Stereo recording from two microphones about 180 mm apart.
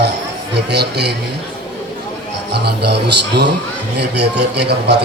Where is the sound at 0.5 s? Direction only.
65° right (ahead or behind).